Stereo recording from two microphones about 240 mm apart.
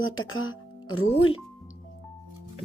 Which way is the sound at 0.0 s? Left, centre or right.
Left.